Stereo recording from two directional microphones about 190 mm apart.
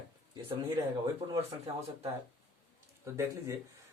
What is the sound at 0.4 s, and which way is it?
Speech, 25° right (ahead or behind).